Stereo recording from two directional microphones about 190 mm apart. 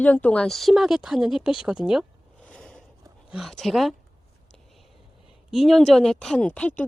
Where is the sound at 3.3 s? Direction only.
Centre (ahead or behind).